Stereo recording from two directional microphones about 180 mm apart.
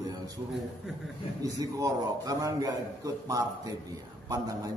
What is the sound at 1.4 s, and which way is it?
Speech, 20° right (ahead or behind).